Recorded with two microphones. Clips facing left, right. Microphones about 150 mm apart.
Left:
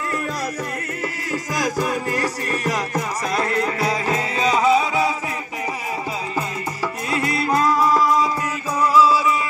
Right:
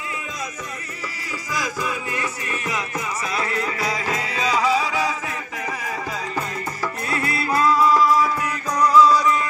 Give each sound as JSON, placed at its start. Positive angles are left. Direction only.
{"t": 1.3, "sound": "music", "side_deg": 45}
{"t": 7.1, "sound": "music", "side_deg": 20}
{"t": 8.7, "sound": "music", "side_deg": 5}